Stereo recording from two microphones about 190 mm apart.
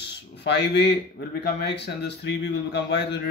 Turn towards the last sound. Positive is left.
turn(degrees=65)  # may be behind; listen again after turning